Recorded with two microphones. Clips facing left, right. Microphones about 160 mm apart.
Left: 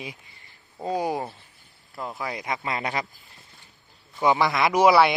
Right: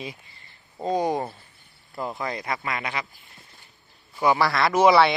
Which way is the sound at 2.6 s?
35° left (ahead or behind).